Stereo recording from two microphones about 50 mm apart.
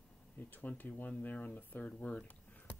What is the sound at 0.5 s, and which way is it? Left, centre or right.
Speech, left.